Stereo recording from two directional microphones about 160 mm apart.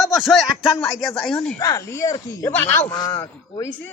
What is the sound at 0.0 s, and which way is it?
Speech, centre (ahead or behind).